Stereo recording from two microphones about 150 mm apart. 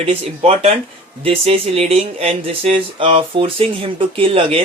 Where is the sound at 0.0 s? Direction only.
45° right (ahead or behind).